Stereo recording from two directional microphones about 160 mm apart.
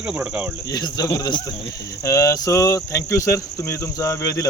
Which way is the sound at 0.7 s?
25° left (ahead or behind).